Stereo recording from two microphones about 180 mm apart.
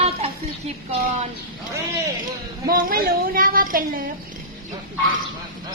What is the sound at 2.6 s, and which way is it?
A woman's voice, 50° right (ahead or behind).